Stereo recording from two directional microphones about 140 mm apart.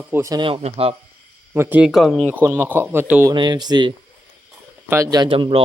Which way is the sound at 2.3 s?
15° right (ahead or behind).